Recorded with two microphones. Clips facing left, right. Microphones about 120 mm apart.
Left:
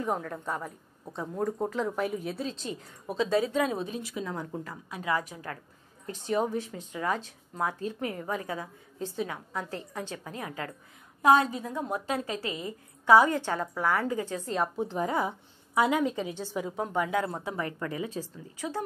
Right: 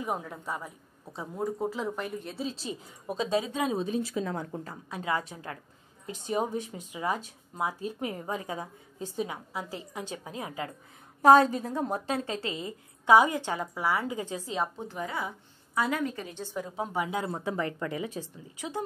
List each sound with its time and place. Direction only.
0.0 s a woman's voice: 5° right (ahead or behind)
3.1 s a woman's voice: 15° right (ahead or behind)
3.7 s a woman's voice: 30° right (ahead or behind); by 8.1 s 10° right (ahead or behind)
8.1 s a woman's voice: 25° right (ahead or behind)
11.2 s a woman's voice: 35° right (ahead or behind); by 14.4 s 15° right (ahead or behind)
14.4 s a woman's voice: centre (ahead or behind)
15.0 s speech: 40° left (ahead or behind)
15.7 s a woman's voice: 20° left (ahead or behind)
16.8 s a woman's voice: 15° right (ahead or behind)